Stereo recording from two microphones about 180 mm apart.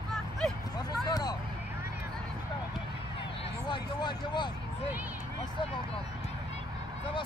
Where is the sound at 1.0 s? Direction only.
20° left (ahead or behind).